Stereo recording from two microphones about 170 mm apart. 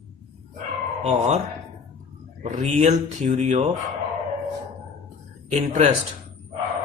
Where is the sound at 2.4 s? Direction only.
45° right (ahead or behind).